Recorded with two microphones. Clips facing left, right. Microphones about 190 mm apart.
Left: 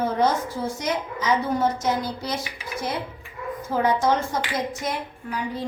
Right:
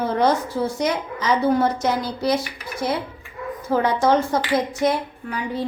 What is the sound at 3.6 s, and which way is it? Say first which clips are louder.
A woman's voice: right 3 dB; 65° right (ahead or behind).